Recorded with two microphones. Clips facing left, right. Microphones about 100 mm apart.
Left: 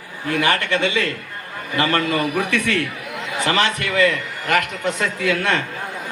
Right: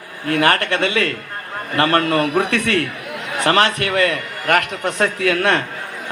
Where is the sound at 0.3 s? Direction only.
55° right (ahead or behind).